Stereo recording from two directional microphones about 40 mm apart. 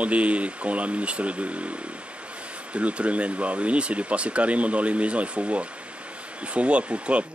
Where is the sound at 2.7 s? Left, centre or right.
Right.